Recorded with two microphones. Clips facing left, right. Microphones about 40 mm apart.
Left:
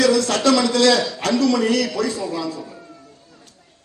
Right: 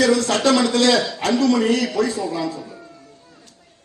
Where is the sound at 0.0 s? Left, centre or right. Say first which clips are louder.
Even; right.